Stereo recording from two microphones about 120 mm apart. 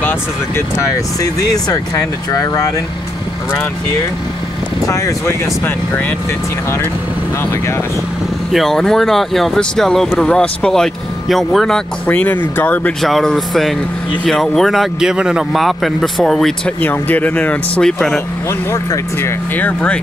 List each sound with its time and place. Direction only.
1.2 s speech: 30° left (ahead or behind)
4.8 s speech: 25° left (ahead or behind)
8.5 s speech: 5° left (ahead or behind)
13.0 s speech: 5° left (ahead or behind)
18.7 s speech: 20° left (ahead or behind)